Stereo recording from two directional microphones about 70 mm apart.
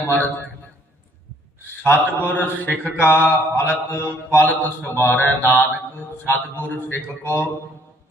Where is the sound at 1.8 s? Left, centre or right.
Left.